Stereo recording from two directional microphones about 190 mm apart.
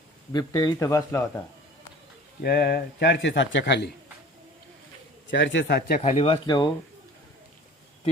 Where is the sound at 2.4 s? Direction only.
55° left (ahead or behind).